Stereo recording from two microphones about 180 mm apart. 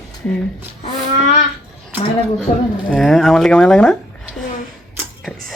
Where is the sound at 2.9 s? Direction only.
5° left (ahead or behind).